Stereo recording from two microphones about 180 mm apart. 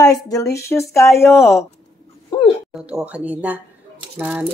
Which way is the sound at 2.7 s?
5° right (ahead or behind).